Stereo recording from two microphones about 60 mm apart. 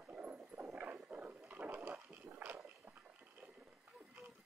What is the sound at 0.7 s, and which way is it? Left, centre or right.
Dog, right.